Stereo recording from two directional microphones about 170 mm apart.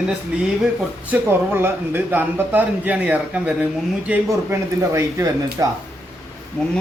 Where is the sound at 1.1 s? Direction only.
10° right (ahead or behind).